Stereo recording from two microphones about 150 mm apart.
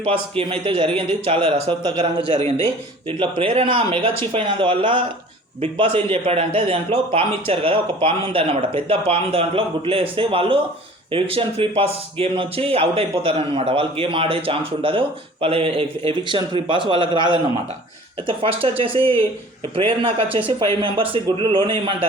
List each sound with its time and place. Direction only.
0.0 s a man's voice: 35° right (ahead or behind)
19.7 s a man's voice: 40° right (ahead or behind)